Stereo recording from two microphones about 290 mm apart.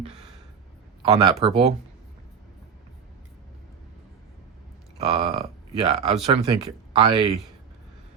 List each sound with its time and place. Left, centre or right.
1.1 s speech: centre
4.9 s speech: centre